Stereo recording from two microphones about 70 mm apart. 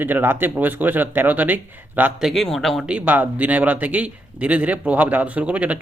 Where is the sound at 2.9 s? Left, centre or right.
Right.